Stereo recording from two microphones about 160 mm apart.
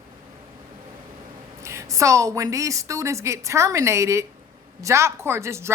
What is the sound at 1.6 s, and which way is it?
A woman's voice, 20° right (ahead or behind).